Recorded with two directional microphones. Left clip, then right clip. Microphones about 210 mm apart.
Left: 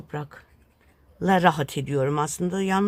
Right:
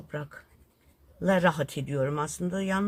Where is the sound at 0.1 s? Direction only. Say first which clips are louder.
Left 3 dB; 45° left (ahead or behind).